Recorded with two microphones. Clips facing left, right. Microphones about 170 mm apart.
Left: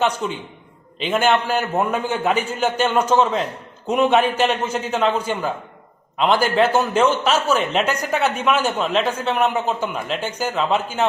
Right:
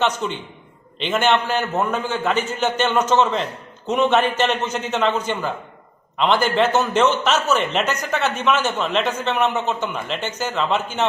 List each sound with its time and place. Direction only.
0.2 s a man's voice: 5° left (ahead or behind)